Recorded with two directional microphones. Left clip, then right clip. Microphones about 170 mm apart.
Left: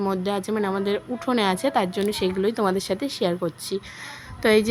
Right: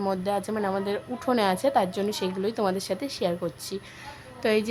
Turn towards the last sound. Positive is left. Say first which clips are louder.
# left 6 dB
turn(degrees=20)  # may be behind; listen again after turning